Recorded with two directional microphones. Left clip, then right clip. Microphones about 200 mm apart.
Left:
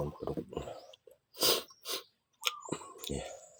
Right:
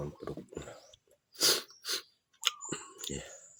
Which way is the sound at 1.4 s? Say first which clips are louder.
Right 1 dB; 15° right (ahead or behind).